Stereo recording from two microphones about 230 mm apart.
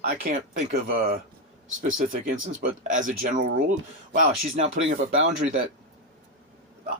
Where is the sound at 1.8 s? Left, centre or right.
Right.